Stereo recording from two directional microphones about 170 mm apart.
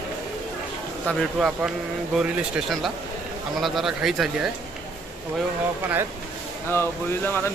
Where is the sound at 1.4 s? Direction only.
5° right (ahead or behind).